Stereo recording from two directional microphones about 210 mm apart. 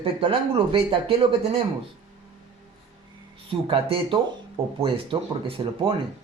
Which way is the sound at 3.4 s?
25° right (ahead or behind).